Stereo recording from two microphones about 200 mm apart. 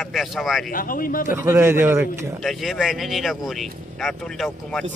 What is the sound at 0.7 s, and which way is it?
Speech, 45° left (ahead or behind).